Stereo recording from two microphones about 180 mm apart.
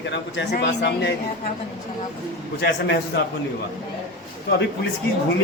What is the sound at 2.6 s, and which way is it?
Speech, 65° left (ahead or behind).